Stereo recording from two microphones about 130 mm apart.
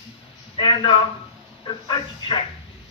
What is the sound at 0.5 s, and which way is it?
A man's voice, 35° left (ahead or behind).